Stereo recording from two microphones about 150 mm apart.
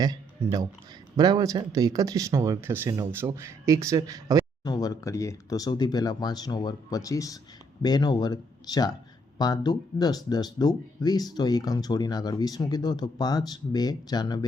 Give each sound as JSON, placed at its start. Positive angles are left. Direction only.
{"t": 0.0, "sound": "speech", "side_deg": -25}
{"t": 4.6, "sound": "speech", "side_deg": 25}